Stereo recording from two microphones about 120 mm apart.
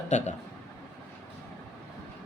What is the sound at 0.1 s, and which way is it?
Speech, 75° left (ahead or behind).